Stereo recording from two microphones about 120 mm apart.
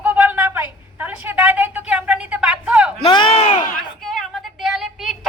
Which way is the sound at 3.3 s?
60° left (ahead or behind).